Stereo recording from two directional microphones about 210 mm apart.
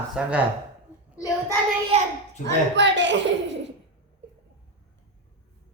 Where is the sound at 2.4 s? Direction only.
60° right (ahead or behind).